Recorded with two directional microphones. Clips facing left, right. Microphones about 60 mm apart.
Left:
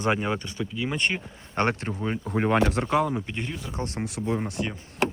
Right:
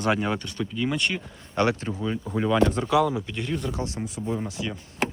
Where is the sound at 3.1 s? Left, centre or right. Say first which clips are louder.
Even; left.